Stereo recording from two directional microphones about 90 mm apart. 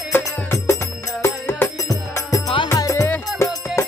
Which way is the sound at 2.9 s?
25° left (ahead or behind).